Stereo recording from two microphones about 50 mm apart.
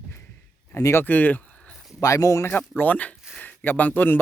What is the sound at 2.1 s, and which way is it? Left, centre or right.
Speech, left.